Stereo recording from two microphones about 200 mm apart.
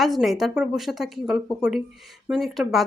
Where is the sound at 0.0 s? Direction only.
Centre (ahead or behind).